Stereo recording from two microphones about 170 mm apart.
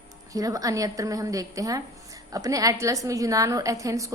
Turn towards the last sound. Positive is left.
turn(degrees=-20)  # may be behind; listen again after turning